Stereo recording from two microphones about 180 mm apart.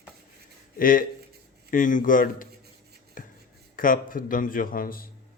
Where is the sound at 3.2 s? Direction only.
50° left (ahead or behind).